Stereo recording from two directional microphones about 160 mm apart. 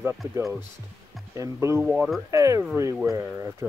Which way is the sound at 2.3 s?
20° right (ahead or behind).